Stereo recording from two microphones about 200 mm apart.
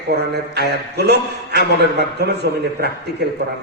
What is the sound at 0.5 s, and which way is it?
A man's voice, 55° right (ahead or behind).